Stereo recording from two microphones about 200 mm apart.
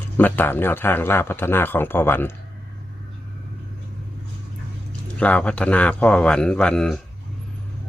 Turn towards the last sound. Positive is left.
turn(degrees=5)  # may be behind; listen again after turning